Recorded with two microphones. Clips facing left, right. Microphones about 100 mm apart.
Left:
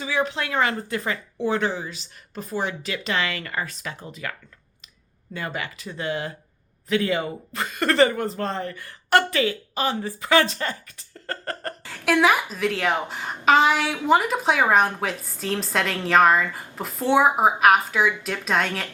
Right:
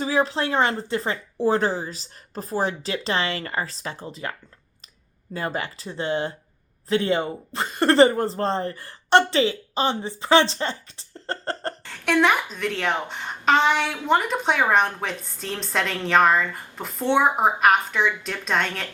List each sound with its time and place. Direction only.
0.0 s speech: 35° right (ahead or behind)
11.8 s a woman's voice: 5° left (ahead or behind)